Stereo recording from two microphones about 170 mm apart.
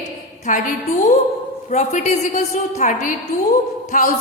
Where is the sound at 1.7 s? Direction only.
45° left (ahead or behind).